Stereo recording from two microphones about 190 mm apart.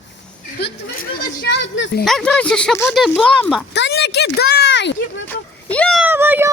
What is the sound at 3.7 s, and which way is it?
Speech, 65° left (ahead or behind).